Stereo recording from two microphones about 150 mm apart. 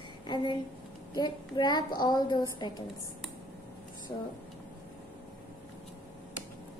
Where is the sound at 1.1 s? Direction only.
30° left (ahead or behind).